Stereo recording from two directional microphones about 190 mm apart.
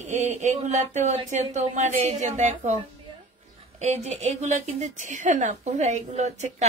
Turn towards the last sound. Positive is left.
turn(degrees=-35)  # may be behind; listen again after turning